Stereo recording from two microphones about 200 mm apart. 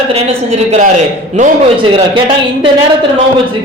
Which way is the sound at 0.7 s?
35° right (ahead or behind).